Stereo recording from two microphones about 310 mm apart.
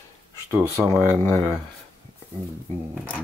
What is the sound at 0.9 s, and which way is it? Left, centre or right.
Speech, centre.